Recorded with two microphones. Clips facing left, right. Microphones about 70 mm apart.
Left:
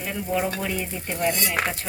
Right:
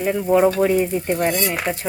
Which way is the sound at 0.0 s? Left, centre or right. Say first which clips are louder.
Right 10 dB; right.